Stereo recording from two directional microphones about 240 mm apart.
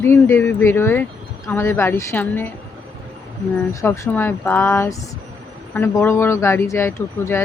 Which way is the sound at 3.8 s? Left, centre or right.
Centre.